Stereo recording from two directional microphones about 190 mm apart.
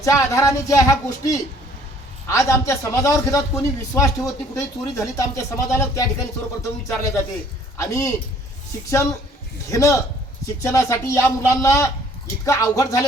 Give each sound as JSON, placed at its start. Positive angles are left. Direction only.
{"t": 0.0, "sound": "speech", "side_deg": 15}
{"t": 9.7, "sound": "speech", "side_deg": 15}